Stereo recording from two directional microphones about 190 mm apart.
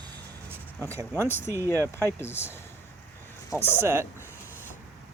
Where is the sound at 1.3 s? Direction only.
10° left (ahead or behind).